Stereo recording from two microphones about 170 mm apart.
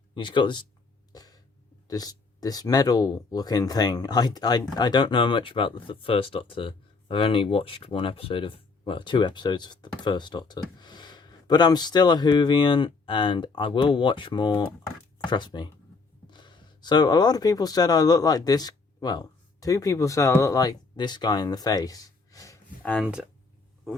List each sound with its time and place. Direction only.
0.1 s speech: 30° left (ahead or behind)
1.1 s a sound: 20° left (ahead or behind)
1.9 s speech: 20° left (ahead or behind)